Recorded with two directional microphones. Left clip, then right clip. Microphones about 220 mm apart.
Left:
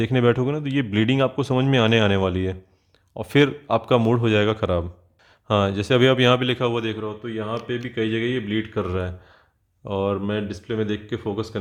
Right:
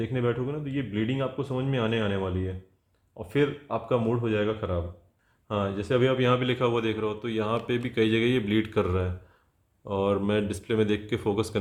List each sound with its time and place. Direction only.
0.0 s a man's voice: 45° left (ahead or behind); by 11.5 s 5° left (ahead or behind)